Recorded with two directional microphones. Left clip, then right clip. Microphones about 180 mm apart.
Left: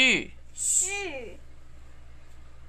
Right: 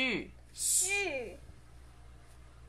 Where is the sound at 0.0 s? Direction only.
15° left (ahead or behind).